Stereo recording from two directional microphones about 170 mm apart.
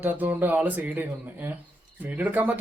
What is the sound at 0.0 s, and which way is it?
A man's voice, 10° right (ahead or behind).